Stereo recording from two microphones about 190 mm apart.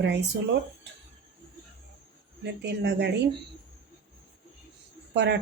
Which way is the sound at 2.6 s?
60° right (ahead or behind).